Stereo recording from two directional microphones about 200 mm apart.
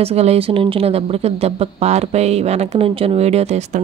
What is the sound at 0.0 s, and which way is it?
A woman's voice, 30° right (ahead or behind).